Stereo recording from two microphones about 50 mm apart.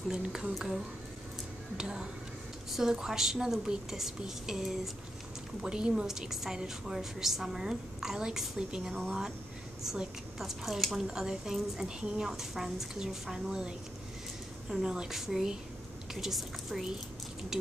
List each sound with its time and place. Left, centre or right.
0.1 s a woman's voice: centre
1.8 s a woman's voice: centre